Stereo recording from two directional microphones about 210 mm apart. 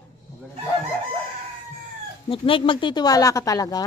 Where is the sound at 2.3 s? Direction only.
25° left (ahead or behind).